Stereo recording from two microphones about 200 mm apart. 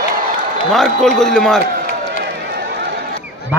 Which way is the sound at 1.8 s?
50° right (ahead or behind).